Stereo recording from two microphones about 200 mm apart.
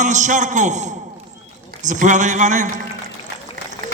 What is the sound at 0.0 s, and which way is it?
A man's voice, 35° right (ahead or behind).